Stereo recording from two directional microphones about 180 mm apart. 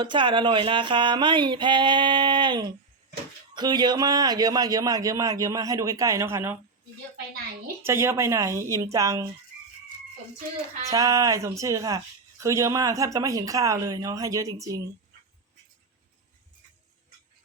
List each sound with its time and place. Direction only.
0.0 s speech: 25° right (ahead or behind)
7.8 s speech: 15° right (ahead or behind)
10.8 s speech: 20° right (ahead or behind)